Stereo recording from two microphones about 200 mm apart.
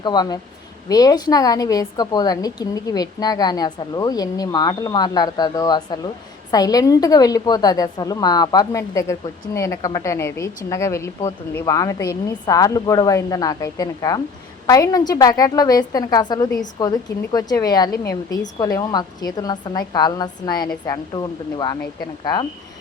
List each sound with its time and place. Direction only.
0.0 s a woman's voice: 20° left (ahead or behind)